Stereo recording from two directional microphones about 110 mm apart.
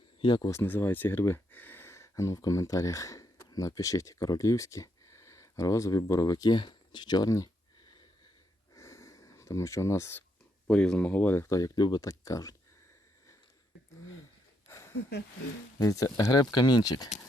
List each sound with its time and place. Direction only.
0.2 s speech: 50° left (ahead or behind)
0.4 s speech: 25° left (ahead or behind)
8.7 s sniff: 25° left (ahead or behind)
10.7 s speech: 10° left (ahead or behind); by 12.5 s 30° left (ahead or behind)
14.7 s a sound: 25° left (ahead or behind)
15.8 s speech: 30° left (ahead or behind)